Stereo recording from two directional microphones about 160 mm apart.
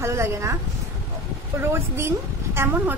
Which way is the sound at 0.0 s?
15° right (ahead or behind).